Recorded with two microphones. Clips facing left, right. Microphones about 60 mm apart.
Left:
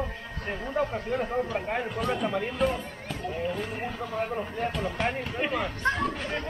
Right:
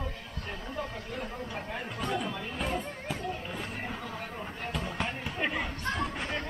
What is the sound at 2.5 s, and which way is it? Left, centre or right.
Speech, centre.